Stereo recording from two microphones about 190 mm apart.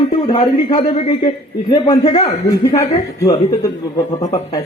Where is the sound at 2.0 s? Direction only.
35° left (ahead or behind).